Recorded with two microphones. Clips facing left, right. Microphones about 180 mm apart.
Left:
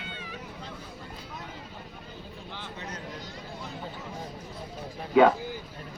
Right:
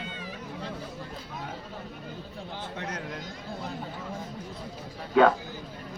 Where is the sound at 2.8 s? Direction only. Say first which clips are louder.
Right 4 dB; 65° right (ahead or behind).